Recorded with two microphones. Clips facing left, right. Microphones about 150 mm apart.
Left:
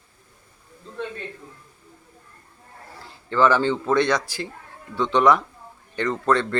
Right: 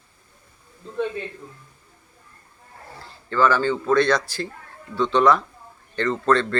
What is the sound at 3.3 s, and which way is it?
Speech, 20° left (ahead or behind).